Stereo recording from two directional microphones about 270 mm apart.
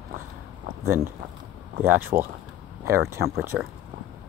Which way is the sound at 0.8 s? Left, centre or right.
Centre.